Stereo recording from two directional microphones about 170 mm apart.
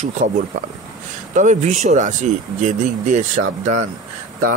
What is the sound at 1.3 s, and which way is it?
Speech, 45° right (ahead or behind).